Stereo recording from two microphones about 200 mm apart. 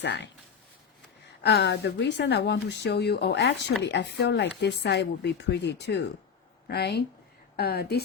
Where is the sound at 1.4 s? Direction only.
55° left (ahead or behind).